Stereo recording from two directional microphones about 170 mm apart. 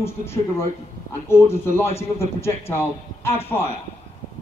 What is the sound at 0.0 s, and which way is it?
A man's voice, 15° left (ahead or behind).